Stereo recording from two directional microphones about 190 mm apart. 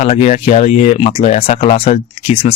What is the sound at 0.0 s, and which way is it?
Speech, 35° left (ahead or behind).